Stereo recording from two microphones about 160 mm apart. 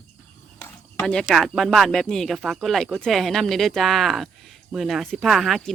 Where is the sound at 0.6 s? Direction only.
10° left (ahead or behind).